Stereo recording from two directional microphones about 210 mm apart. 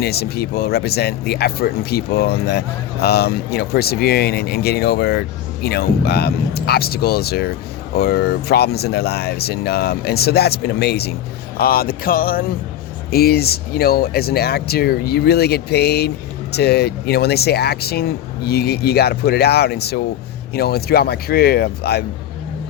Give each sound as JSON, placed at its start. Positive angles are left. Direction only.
{"t": 0.0, "sound": "speech", "side_deg": 50}